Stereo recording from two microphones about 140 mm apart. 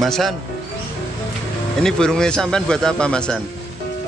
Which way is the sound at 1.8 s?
5° left (ahead or behind).